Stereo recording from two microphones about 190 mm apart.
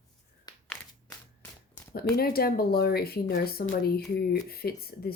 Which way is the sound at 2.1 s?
55° left (ahead or behind).